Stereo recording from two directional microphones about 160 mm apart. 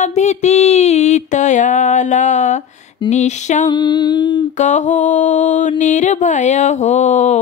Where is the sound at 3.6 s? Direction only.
25° left (ahead or behind).